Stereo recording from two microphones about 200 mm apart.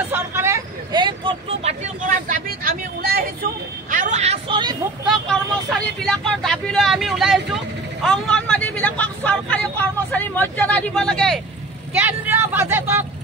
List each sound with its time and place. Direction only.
0.1 s speech: 10° right (ahead or behind); by 3.3 s 50° right (ahead or behind)
3.9 s speech: 40° right (ahead or behind); by 4.7 s 25° right (ahead or behind)
5.0 s speech: centre (ahead or behind)
11.9 s speech: 10° right (ahead or behind)